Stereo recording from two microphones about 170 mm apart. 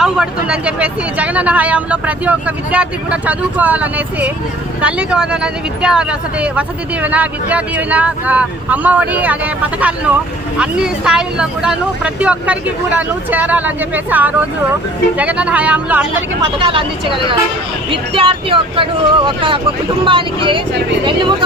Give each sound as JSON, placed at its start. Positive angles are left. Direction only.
{"t": 0.0, "sound": "speech", "side_deg": -5}
{"t": 16.6, "sound": "speech", "side_deg": -30}